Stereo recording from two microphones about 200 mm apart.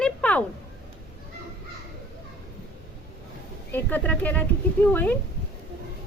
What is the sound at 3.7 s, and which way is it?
A woman's voice, 10° left (ahead or behind).